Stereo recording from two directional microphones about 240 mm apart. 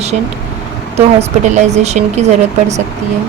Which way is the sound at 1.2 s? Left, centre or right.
Right.